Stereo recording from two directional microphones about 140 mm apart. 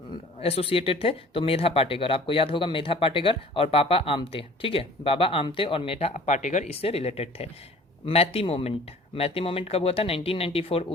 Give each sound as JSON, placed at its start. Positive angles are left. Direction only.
{"t": 0.3, "sound": "speech", "side_deg": 45}